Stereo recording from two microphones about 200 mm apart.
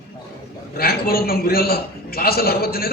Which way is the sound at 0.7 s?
50° left (ahead or behind).